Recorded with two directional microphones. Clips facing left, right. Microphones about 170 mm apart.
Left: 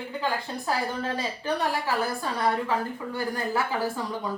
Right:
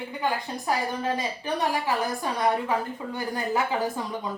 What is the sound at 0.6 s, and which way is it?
A woman's voice, 15° right (ahead or behind).